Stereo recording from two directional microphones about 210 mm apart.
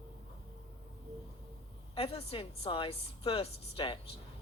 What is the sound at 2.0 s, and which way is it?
A woman's voice, 25° left (ahead or behind).